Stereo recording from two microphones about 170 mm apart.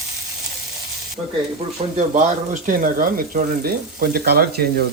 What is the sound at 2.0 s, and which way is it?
Speech, 50° right (ahead or behind).